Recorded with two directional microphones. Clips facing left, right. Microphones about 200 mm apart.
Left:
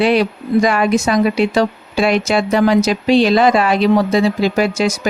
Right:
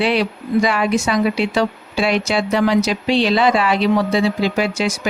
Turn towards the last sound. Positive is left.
turn(degrees=45)  # may be behind; listen again after turning